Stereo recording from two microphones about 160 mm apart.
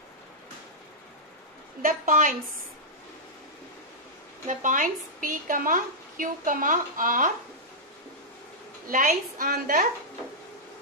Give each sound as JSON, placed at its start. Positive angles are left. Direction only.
{"t": 1.8, "sound": "a woman's voice", "side_deg": -55}
{"t": 4.5, "sound": "a woman's voice", "side_deg": -55}
{"t": 8.8, "sound": "a woman's voice", "side_deg": -60}